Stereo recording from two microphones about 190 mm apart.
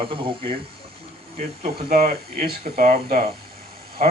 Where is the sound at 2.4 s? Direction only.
50° right (ahead or behind).